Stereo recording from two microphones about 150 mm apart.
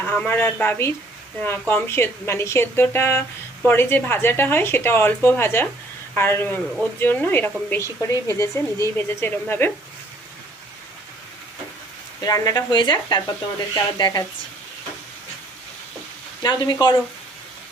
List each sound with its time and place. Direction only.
0.0 s a woman's voice: 15° left (ahead or behind)
12.2 s speech: 25° left (ahead or behind)
16.4 s speech: 30° left (ahead or behind)